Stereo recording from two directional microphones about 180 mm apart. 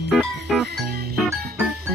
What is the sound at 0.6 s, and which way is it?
Music, 60° right (ahead or behind).